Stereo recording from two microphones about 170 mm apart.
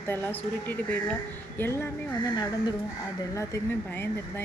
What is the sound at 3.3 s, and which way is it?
Speech, 15° left (ahead or behind).